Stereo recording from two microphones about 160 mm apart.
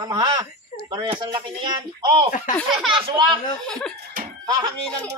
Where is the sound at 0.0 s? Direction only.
25° right (ahead or behind).